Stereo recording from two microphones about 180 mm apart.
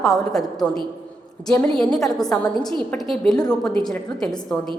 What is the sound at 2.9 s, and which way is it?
A woman's voice, centre (ahead or behind).